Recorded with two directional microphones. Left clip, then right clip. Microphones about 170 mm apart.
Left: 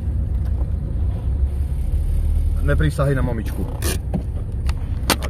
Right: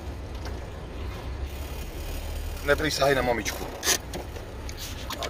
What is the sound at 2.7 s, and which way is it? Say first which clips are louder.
Speech: even; 5° right (ahead or behind).